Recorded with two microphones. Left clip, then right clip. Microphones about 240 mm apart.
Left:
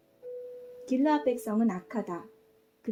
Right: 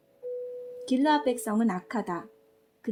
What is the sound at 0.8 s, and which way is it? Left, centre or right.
A woman's voice, right.